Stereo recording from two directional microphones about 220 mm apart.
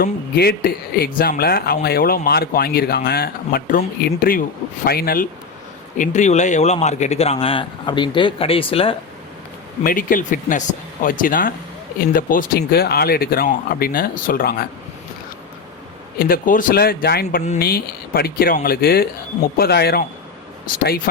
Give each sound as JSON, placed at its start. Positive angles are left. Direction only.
{"t": 0.0, "sound": "speech", "side_deg": 45}
{"t": 9.8, "sound": "a man's voice", "side_deg": 40}
{"t": 16.1, "sound": "a man's voice", "side_deg": 40}
{"t": 17.4, "sound": "a man's voice", "side_deg": 30}
{"t": 17.7, "sound": "speech", "side_deg": 45}